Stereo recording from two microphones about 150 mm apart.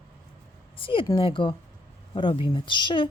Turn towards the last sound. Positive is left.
turn(degrees=30)  # may be behind; listen again after turning